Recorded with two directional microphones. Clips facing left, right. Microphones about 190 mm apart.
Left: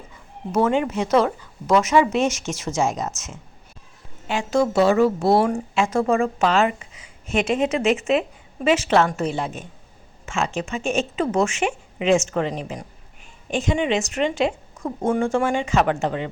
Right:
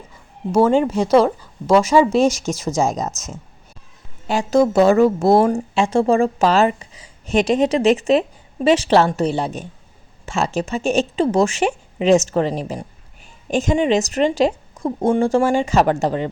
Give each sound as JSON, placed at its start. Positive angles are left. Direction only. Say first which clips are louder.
{"t": 0.5, "sound": "speech", "louder": "right 5 dB", "side_deg": -35}